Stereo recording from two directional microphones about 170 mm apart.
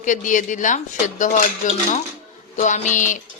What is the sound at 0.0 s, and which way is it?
Speech, 50° left (ahead or behind).